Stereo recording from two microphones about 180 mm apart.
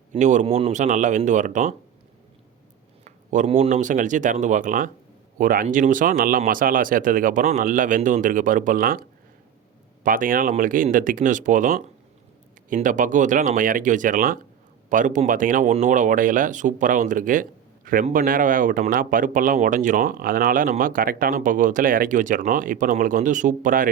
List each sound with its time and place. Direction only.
0.1 s speech: 40° right (ahead or behind)
3.0 s speech: 45° right (ahead or behind)